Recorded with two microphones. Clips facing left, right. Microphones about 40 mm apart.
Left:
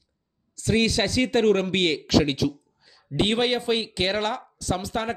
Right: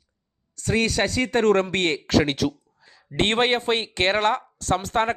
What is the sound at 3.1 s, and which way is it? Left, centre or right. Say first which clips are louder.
Speech: right 2 dB; right.